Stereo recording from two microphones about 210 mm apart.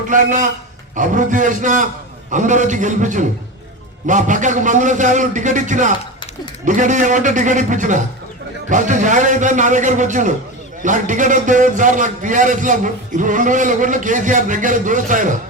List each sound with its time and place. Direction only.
0.1 s a man's voice: 35° right (ahead or behind)